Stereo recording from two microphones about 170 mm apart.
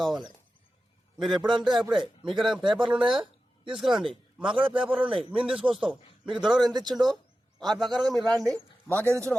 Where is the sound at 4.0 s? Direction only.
30° right (ahead or behind).